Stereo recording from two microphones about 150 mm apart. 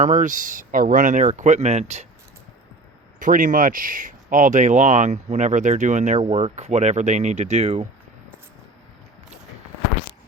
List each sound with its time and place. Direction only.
0.0 s speech: 55° right (ahead or behind)
3.2 s speech: 60° right (ahead or behind)